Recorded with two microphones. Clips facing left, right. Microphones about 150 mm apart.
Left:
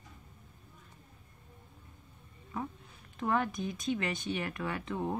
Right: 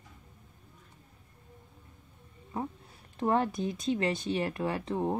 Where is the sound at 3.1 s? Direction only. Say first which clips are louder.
Right 4 dB; 35° right (ahead or behind).